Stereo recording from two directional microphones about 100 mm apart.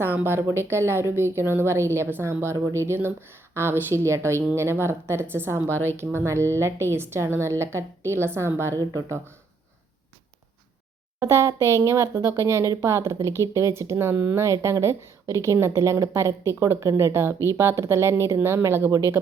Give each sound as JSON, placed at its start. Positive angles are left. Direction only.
{"t": 0.0, "sound": "speech", "side_deg": -20}
{"t": 11.2, "sound": "speech", "side_deg": -30}